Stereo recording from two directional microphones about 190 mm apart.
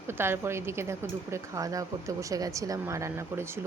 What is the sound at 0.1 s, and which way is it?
A woman's voice, 15° right (ahead or behind).